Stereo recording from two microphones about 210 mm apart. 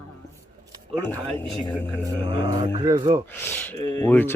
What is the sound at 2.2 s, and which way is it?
Mantra, 20° right (ahead or behind).